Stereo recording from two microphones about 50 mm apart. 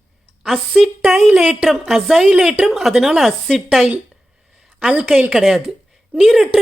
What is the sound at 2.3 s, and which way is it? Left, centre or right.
Speech, centre.